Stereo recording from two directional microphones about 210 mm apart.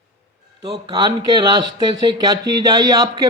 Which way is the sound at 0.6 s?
20° right (ahead or behind).